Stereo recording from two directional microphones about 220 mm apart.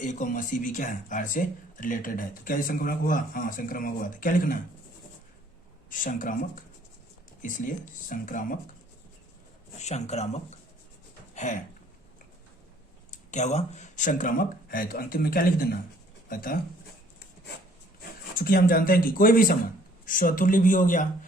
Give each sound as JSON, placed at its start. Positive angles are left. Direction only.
{"t": 0.0, "sound": "speech", "side_deg": 35}
{"t": 5.9, "sound": "speech", "side_deg": 40}
{"t": 8.1, "sound": "speech", "side_deg": 40}
{"t": 9.7, "sound": "speech", "side_deg": 30}
{"t": 11.3, "sound": "a sound", "side_deg": 35}
{"t": 13.1, "sound": "speech", "side_deg": 30}
{"t": 18.3, "sound": "speech", "side_deg": 40}